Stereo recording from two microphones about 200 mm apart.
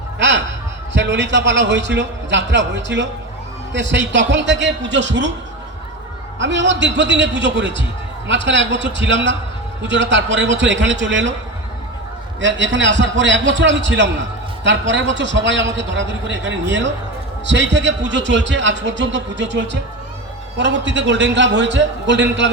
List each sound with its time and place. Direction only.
0.2 s music: 65° right (ahead or behind)
0.9 s a man's voice: 65° right (ahead or behind)
6.4 s a man's voice: 65° right (ahead or behind)
12.4 s a man's voice: 65° right (ahead or behind)